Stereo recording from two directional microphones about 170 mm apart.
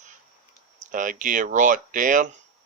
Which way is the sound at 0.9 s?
50° right (ahead or behind).